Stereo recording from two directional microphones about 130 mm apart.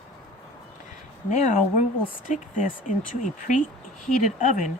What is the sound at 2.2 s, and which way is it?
Speech, 90° left.